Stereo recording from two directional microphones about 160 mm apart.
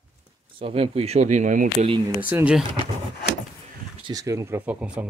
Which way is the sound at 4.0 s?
20° right (ahead or behind).